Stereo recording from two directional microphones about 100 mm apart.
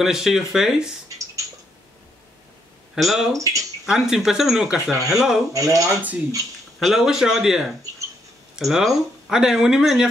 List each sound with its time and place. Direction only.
0.0 s speech: 5° right (ahead or behind)
1.0 s a sound: 35° right (ahead or behind)
2.9 s speech: centre (ahead or behind)
3.3 s speech: 35° right (ahead or behind)
3.8 s speech: 5° right (ahead or behind)
4.9 s speech: 35° right (ahead or behind)
5.2 s speech: 5° right (ahead or behind)
5.5 s speech: 35° right (ahead or behind)
6.8 s speech: 5° right (ahead or behind)